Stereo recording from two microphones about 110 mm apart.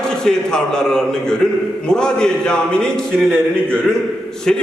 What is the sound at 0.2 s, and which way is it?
A man's voice, 5° left (ahead or behind).